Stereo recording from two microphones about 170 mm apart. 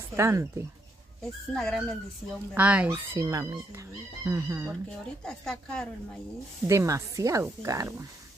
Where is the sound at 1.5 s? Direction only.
Centre (ahead or behind); by 4.6 s 15° right (ahead or behind).